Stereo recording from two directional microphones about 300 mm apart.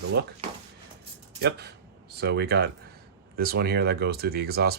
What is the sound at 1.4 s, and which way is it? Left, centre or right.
Speech, right.